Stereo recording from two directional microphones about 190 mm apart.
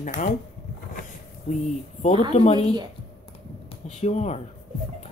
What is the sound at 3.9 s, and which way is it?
Speech, 35° left (ahead or behind).